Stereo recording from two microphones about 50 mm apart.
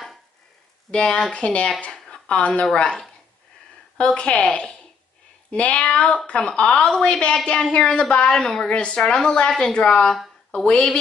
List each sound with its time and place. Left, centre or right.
0.9 s a woman's voice: left